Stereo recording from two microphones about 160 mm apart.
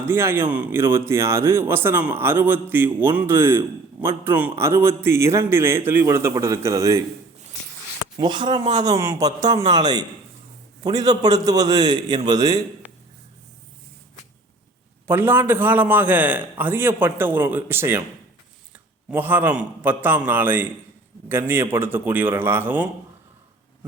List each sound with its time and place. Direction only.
0.0 s a man's voice: 15° right (ahead or behind)
8.1 s speech: 30° right (ahead or behind)
15.0 s a man's voice: 15° right (ahead or behind)
19.1 s a man's voice: 10° right (ahead or behind)